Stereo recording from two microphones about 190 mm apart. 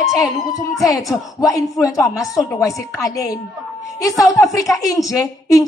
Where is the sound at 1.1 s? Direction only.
15° left (ahead or behind).